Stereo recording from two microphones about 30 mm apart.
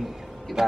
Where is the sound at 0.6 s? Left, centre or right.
Right.